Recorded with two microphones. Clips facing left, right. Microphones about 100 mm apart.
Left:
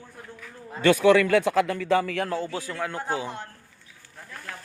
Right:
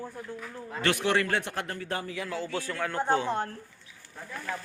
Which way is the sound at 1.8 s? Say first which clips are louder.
Left 10 dB; 90° left.